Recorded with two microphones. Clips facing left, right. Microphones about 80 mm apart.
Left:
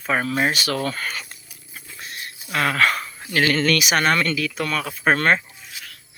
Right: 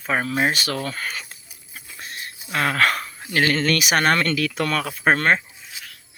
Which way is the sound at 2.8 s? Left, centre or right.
Right.